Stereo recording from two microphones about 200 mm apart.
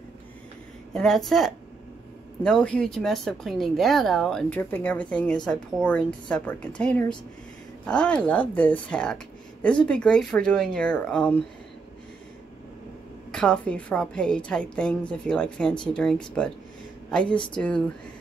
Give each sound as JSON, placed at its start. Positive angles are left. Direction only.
{"t": 0.9, "sound": "speech", "side_deg": 0}
{"t": 13.3, "sound": "speech", "side_deg": 5}
{"t": 17.6, "sound": "speech", "side_deg": 5}